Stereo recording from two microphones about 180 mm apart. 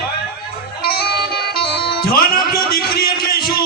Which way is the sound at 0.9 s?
60° left (ahead or behind).